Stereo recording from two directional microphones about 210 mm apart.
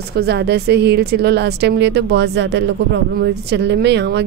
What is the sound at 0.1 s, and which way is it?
Speech, 50° right (ahead or behind).